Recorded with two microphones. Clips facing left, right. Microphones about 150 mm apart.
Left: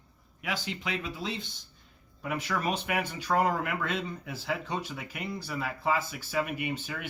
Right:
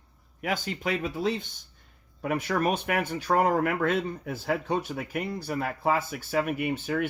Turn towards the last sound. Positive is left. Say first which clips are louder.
# right 7 dB
turn(degrees=-50)  # may be behind; listen again after turning